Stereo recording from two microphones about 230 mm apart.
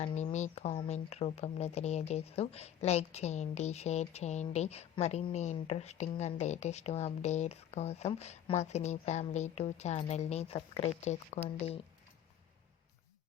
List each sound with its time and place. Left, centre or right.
0.0 s speech: left